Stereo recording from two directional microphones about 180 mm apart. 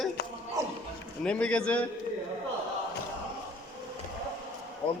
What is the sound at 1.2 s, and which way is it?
Speech, 5° left (ahead or behind).